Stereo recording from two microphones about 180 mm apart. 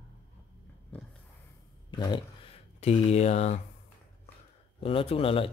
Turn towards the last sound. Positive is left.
turn(degrees=30)  # may be behind; listen again after turning